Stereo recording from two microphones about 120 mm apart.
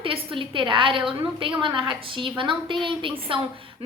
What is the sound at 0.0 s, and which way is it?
A woman's voice, 50° right (ahead or behind).